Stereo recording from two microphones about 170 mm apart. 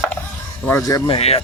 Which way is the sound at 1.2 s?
35° left (ahead or behind).